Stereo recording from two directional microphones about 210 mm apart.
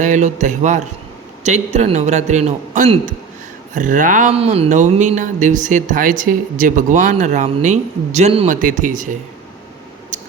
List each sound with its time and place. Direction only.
0.0 s speech: 35° right (ahead or behind)